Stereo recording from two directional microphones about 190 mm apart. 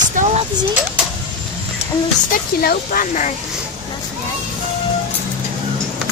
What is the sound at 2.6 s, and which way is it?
Speech, 50° left (ahead or behind).